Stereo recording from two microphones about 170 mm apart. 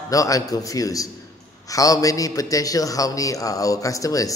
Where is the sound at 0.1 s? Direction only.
20° left (ahead or behind).